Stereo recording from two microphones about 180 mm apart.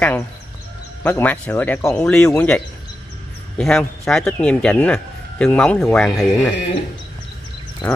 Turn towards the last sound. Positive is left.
turn(degrees=5)  # may be behind; listen again after turning